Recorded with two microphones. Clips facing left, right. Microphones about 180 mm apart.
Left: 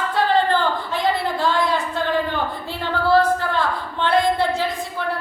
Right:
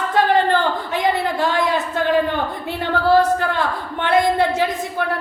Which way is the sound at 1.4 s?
20° right (ahead or behind).